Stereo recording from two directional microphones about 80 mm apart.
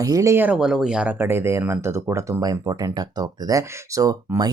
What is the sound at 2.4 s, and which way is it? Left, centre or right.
Speech, right.